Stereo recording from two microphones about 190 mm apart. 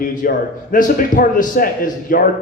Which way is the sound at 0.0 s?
45° left (ahead or behind).